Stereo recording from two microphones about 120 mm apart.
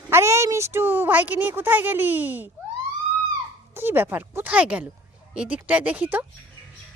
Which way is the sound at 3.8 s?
20° right (ahead or behind).